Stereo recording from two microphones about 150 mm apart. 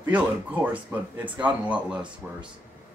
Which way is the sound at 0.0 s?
10° right (ahead or behind).